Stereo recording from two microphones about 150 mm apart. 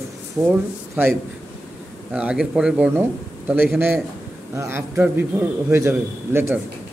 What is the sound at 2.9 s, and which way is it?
A man's voice, 15° right (ahead or behind).